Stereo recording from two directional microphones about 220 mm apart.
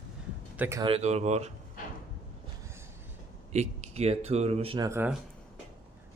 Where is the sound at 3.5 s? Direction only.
30° right (ahead or behind); by 5.1 s 10° right (ahead or behind).